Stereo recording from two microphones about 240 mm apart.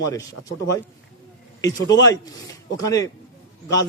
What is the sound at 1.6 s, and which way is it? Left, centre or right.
A man's voice, centre.